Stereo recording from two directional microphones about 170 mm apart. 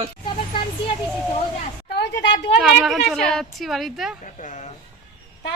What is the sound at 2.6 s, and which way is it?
A woman's voice, centre (ahead or behind).